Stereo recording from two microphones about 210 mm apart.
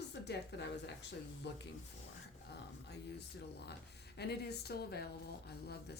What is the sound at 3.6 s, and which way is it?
Speech, 50° left (ahead or behind).